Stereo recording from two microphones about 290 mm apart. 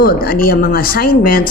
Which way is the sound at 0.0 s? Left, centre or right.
Left.